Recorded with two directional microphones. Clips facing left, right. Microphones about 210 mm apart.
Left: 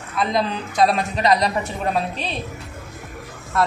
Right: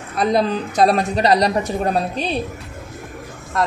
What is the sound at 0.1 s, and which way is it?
A woman's voice, 40° right (ahead or behind).